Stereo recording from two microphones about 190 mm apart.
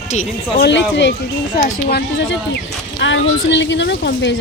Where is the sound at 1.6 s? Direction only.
55° left (ahead or behind).